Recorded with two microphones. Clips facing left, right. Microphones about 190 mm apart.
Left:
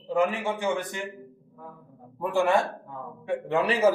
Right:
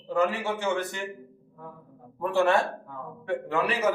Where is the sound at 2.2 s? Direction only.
15° left (ahead or behind).